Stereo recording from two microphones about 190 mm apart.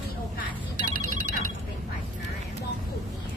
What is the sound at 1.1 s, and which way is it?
Telephone bell ringing, 45° right (ahead or behind).